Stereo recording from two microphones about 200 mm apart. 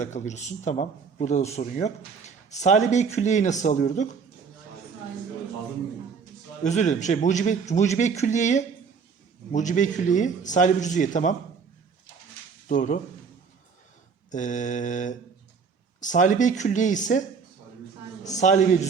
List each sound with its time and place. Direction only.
0.0 s speech: 35° left (ahead or behind)
6.7 s speech: 35° left (ahead or behind)
12.6 s speech: 40° left (ahead or behind)
14.3 s speech: 40° left (ahead or behind)
18.3 s speech: 35° left (ahead or behind)